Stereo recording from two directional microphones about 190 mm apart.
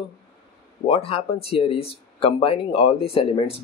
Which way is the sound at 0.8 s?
30° left (ahead or behind).